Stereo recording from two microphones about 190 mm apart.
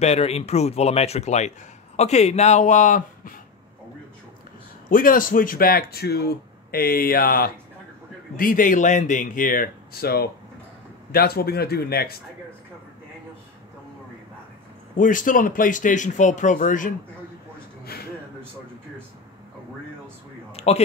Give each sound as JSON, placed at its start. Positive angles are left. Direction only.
{"t": 0.0, "sound": "speech", "side_deg": 35}
{"t": 4.8, "sound": "a man's voice", "side_deg": 45}
{"t": 15.0, "sound": "a man's voice", "side_deg": 45}
{"t": 20.5, "sound": "a sound", "side_deg": 35}